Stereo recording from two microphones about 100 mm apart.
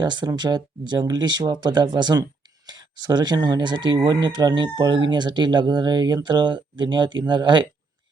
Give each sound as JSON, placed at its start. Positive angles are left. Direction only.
{"t": 0.0, "sound": "speech", "side_deg": -50}